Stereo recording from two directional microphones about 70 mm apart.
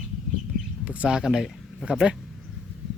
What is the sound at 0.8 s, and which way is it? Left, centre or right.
Speech, right.